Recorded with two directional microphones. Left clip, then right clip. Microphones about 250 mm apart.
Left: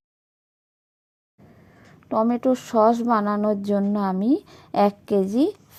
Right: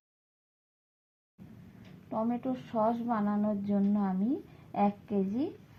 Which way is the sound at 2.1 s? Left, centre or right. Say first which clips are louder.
Left 13 dB; left.